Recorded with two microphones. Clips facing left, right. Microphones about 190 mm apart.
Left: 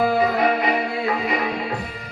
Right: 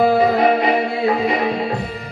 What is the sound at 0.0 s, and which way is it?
Music, 30° right (ahead or behind).